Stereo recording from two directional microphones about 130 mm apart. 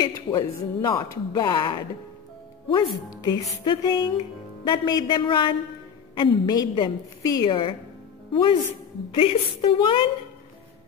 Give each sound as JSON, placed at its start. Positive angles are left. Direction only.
{"t": 0.0, "sound": "a woman's voice", "side_deg": 30}